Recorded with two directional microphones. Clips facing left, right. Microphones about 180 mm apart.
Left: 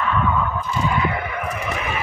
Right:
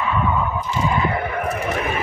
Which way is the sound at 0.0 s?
10° right (ahead or behind).